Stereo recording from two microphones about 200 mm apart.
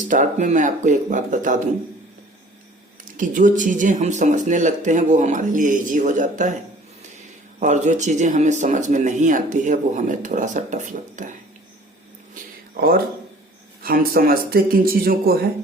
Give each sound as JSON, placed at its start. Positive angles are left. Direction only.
{"t": 0.0, "sound": "speech", "side_deg": -40}
{"t": 3.2, "sound": "speech", "side_deg": -40}
{"t": 7.6, "sound": "speech", "side_deg": -35}
{"t": 13.8, "sound": "speech", "side_deg": -50}